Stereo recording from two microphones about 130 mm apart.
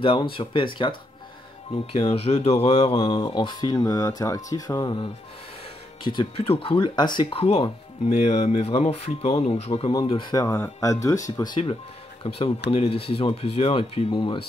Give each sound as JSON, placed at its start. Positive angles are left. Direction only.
{"t": 0.0, "sound": "speech", "side_deg": 40}
{"t": 3.1, "sound": "speech", "side_deg": 35}
{"t": 7.4, "sound": "speech", "side_deg": 50}
{"t": 10.0, "sound": "speech", "side_deg": 40}
{"t": 10.4, "sound": "speech", "side_deg": 25}
{"t": 11.3, "sound": "speech", "side_deg": 35}